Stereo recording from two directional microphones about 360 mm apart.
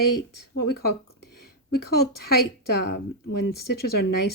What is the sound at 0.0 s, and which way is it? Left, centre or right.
Speech, left.